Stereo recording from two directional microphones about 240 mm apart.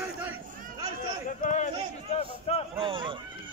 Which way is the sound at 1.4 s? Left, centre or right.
Left.